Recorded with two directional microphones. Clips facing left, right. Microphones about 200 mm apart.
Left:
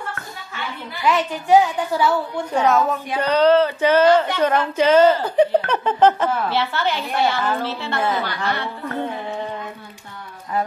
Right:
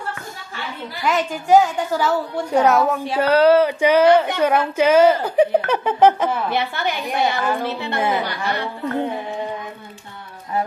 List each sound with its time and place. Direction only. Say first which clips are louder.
0.9 s a woman's voice: left 1 dB; 45° right (ahead or behind)
2.5 s speech: right 2 dB; 10° right (ahead or behind)